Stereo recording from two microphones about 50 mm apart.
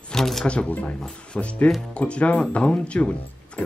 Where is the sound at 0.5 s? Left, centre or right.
Left.